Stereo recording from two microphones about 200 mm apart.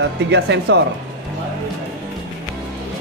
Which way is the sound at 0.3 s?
60° right (ahead or behind).